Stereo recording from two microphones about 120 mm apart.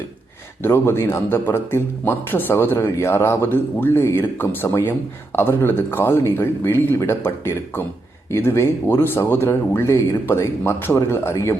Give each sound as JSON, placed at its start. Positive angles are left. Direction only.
{"t": 0.6, "sound": "speech", "side_deg": 20}